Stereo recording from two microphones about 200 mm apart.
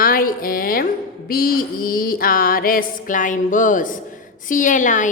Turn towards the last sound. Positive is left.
turn(degrees=40)  # may be behind; listen again after turning